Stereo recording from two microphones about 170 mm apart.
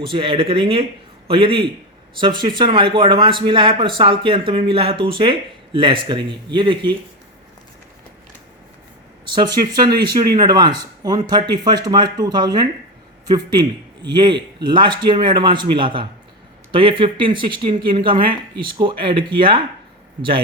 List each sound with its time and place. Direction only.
0.1 s speech: 30° right (ahead or behind)
9.2 s speech: 25° right (ahead or behind)